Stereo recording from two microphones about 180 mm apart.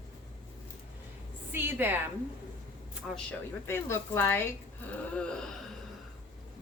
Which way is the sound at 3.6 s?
15° left (ahead or behind).